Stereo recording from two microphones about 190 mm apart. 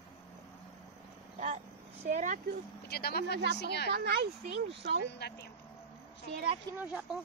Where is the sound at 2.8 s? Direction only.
55° left (ahead or behind).